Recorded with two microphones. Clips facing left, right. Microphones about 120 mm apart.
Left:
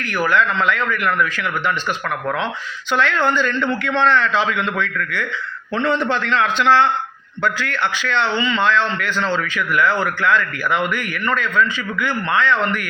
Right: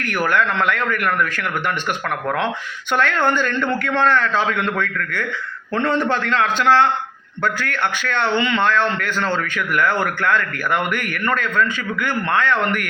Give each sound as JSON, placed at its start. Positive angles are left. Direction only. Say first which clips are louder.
{"t": 0.3, "sound": "a man's voice", "louder": "left 1 dB", "side_deg": -55}
{"t": 2.9, "sound": "a man's voice", "louder": "even", "side_deg": -50}